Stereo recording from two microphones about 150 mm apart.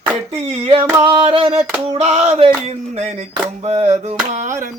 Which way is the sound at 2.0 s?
45° right (ahead or behind).